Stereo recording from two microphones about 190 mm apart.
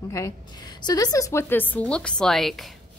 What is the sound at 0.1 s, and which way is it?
A woman's voice, 20° left (ahead or behind).